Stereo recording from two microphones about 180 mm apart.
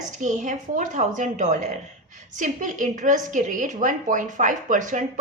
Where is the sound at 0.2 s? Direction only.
45° right (ahead or behind).